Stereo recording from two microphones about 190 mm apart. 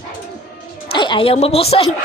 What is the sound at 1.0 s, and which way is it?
Speech, 25° left (ahead or behind).